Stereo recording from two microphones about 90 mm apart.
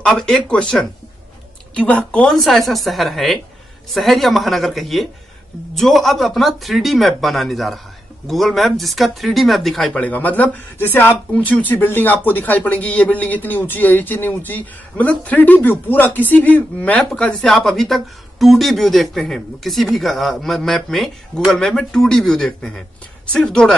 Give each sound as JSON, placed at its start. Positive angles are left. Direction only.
{"t": 0.0, "sound": "speech", "side_deg": 10}
{"t": 2.2, "sound": "speech", "side_deg": 0}
{"t": 9.9, "sound": "speech", "side_deg": 15}